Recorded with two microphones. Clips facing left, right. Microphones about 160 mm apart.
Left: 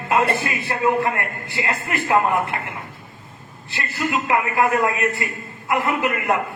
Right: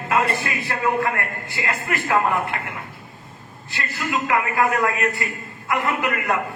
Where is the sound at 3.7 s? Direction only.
25° left (ahead or behind).